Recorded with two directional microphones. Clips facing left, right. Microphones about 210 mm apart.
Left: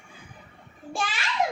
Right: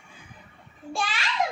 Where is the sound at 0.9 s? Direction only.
15° left (ahead or behind).